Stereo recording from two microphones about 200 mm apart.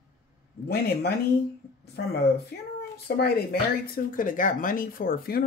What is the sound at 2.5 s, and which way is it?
Speech, 50° left (ahead or behind).